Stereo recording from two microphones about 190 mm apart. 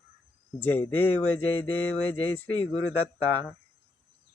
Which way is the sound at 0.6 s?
10° left (ahead or behind).